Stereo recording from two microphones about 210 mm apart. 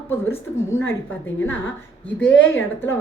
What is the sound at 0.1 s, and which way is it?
A woman's voice, 10° left (ahead or behind).